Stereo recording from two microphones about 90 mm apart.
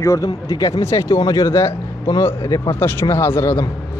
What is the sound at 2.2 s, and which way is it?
A man's voice, 30° left (ahead or behind).